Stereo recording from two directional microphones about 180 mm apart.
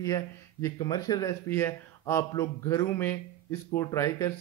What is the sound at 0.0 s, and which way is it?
Speech, 15° left (ahead or behind).